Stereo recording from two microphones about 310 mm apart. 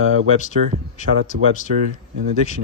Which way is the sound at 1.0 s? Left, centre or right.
Left.